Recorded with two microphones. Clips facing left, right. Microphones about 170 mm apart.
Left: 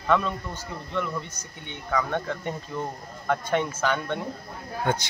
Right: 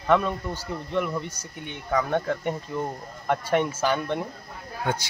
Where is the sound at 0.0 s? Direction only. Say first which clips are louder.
Right 2 dB; 15° right (ahead or behind).